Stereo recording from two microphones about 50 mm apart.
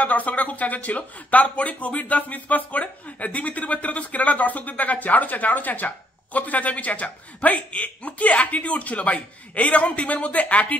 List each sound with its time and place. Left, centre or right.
0.0 s speech: left